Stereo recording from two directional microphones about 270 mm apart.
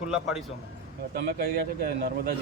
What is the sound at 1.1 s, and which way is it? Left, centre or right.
A man's voice, right.